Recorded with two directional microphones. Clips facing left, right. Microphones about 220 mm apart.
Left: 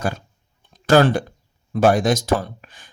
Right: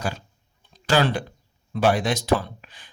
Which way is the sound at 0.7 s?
50° left (ahead or behind).